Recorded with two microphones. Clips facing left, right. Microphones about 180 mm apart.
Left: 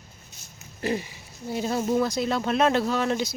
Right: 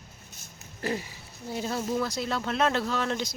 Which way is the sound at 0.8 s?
20° left (ahead or behind).